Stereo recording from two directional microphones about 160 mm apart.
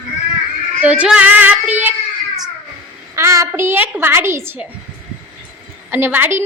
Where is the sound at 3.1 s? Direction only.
20° right (ahead or behind).